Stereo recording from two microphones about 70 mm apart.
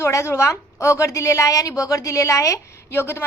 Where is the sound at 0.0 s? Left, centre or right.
Left.